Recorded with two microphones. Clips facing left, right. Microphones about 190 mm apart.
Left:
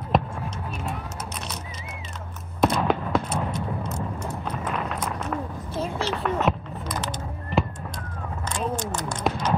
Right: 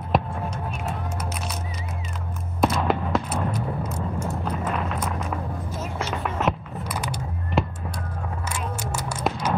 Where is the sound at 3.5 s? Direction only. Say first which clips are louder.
Right 1 dB; 25° left (ahead or behind).